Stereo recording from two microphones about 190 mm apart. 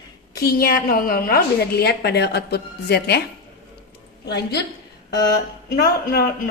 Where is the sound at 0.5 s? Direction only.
50° left (ahead or behind).